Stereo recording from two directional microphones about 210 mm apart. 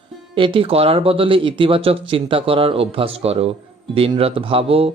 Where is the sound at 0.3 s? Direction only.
25° right (ahead or behind).